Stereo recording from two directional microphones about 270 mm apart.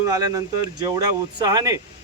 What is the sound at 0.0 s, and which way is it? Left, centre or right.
Speech, centre.